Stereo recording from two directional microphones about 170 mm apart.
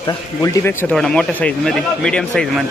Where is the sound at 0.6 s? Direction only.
10° left (ahead or behind).